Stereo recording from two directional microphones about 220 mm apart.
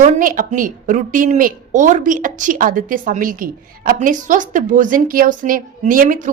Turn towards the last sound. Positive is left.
turn(degrees=-35)  # may be behind; listen again after turning